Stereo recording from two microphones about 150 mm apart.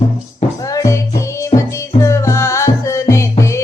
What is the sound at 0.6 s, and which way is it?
Music, 20° left (ahead or behind).